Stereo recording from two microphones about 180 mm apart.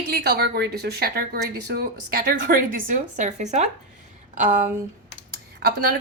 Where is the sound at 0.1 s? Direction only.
65° right (ahead or behind); by 4.7 s 45° right (ahead or behind).